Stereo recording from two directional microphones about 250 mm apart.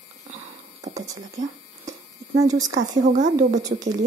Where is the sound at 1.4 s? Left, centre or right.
Right.